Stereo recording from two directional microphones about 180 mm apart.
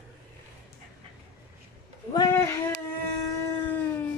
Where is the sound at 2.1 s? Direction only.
20° left (ahead or behind).